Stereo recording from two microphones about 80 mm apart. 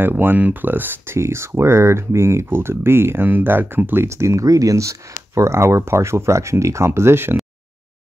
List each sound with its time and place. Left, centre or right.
0.0 s speech: right